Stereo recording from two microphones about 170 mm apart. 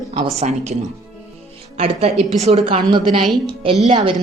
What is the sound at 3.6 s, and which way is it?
Speech, 30° right (ahead or behind).